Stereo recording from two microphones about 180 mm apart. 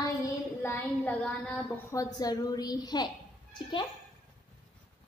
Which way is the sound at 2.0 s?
20° left (ahead or behind).